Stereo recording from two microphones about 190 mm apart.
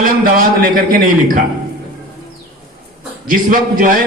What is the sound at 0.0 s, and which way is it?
A man's voice, 50° right (ahead or behind).